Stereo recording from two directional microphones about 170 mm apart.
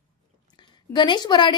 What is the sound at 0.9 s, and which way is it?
Speech, 25° left (ahead or behind).